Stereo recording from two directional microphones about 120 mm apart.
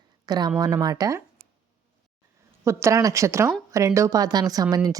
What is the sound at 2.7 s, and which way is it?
A woman's voice, 20° right (ahead or behind).